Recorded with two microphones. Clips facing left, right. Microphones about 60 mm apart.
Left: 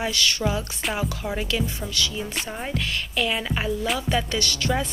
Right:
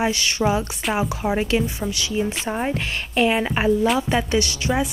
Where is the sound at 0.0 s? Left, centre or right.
Right.